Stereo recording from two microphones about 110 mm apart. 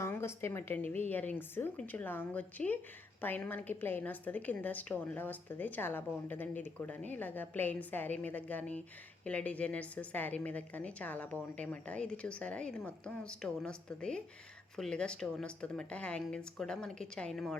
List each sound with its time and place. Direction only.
0.0 s a woman's voice: 25° left (ahead or behind); by 17.6 s 5° left (ahead or behind)